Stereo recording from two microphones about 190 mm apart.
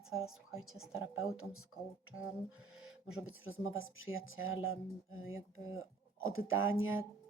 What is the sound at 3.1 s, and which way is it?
Speech, 5° right (ahead or behind).